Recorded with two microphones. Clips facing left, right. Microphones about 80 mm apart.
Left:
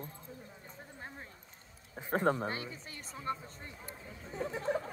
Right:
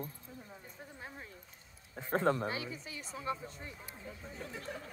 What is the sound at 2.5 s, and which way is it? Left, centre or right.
Speech, centre.